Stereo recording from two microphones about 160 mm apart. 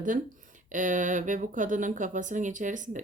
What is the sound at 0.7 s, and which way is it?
Speech, 55° right (ahead or behind).